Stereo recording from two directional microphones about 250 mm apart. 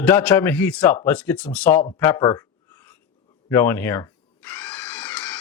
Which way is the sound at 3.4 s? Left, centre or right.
Centre.